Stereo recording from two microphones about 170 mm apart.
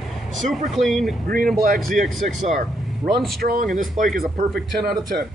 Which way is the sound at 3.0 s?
Centre (ahead or behind).